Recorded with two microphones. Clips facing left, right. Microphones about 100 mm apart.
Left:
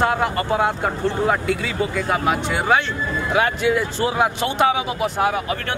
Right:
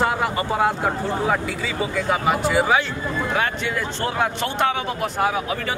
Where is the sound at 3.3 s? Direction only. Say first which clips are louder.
Left 8 dB; 10° left (ahead or behind).